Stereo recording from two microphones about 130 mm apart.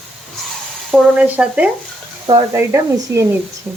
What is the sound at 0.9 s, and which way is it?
Speech, 10° right (ahead or behind).